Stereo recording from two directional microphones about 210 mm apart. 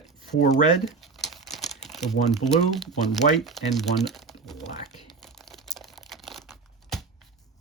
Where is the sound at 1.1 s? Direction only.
Centre (ahead or behind).